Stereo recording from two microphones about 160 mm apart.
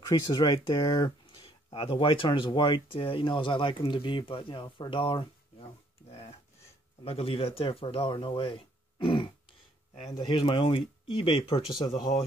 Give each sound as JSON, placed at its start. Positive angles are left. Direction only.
{"t": 0.3, "sound": "speech", "side_deg": 25}